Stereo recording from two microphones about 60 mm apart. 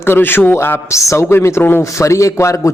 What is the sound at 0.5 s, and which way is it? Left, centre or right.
Speech, left.